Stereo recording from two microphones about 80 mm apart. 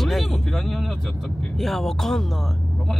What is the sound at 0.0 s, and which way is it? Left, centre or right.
Speech, centre.